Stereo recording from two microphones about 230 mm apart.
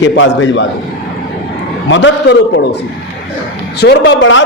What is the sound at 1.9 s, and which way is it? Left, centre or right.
Speech, left.